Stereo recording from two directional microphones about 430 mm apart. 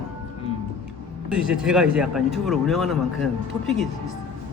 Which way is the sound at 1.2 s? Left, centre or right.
Centre.